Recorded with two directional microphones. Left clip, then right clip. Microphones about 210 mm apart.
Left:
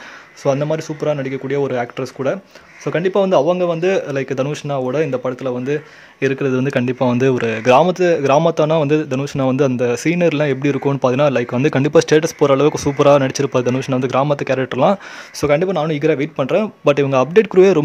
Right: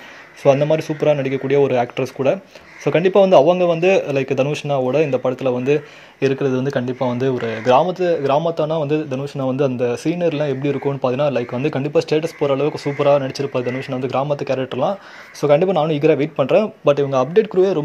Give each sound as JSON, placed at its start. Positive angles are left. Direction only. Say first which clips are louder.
{"t": 0.4, "sound": "a man's voice", "louder": "right 3 dB", "side_deg": 5}
{"t": 6.2, "sound": "speech", "louder": "left 1 dB", "side_deg": 20}
{"t": 15.4, "sound": "a man's voice", "louder": "right 1 dB", "side_deg": 10}
{"t": 16.8, "sound": "speech", "louder": "left 2 dB", "side_deg": 25}